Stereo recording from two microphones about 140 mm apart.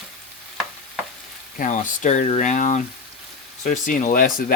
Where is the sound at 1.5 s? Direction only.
65° left (ahead or behind).